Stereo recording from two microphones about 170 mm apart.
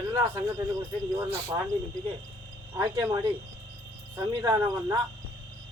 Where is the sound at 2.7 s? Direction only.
20° right (ahead or behind).